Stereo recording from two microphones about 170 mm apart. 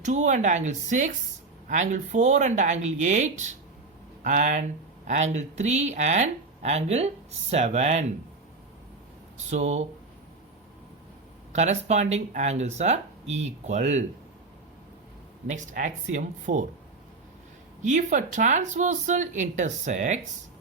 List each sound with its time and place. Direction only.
0.0 s speech: 45° right (ahead or behind)
9.5 s speech: 40° right (ahead or behind)
11.5 s speech: 40° right (ahead or behind)
15.4 s speech: 50° right (ahead or behind)
17.8 s speech: 45° right (ahead or behind)